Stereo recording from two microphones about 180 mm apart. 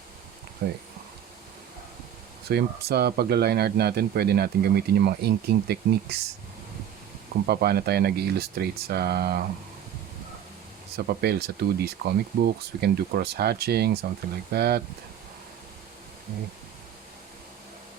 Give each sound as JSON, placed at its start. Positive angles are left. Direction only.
{"t": 0.6, "sound": "speech", "side_deg": -70}
{"t": 2.5, "sound": "speech", "side_deg": -65}
{"t": 7.4, "sound": "speech", "side_deg": -60}
{"t": 10.9, "sound": "speech", "side_deg": -60}